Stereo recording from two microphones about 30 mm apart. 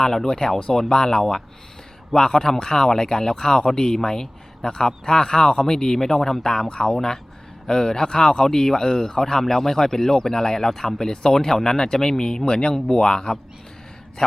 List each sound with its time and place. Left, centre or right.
0.0 s speech: centre
10.7 s speech: centre
11.0 s speech: left